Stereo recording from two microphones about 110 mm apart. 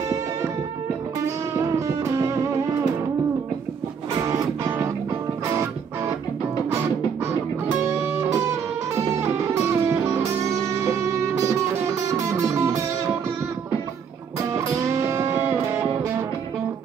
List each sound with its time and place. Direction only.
1.9 s music: 30° right (ahead or behind)
4.3 s music: 35° right (ahead or behind)
9.7 s music: 20° right (ahead or behind)
14.5 s music: 25° right (ahead or behind)